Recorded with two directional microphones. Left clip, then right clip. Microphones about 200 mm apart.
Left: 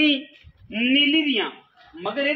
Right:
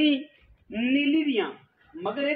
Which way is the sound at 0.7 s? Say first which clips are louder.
Left 6 dB; 40° left (ahead or behind).